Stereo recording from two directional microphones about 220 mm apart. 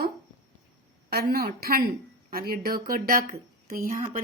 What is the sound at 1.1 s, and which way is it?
A woman's voice, 45° right (ahead or behind).